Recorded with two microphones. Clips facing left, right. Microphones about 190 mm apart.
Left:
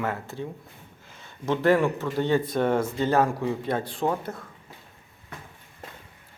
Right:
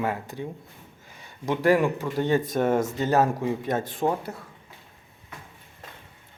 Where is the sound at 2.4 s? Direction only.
45° right (ahead or behind).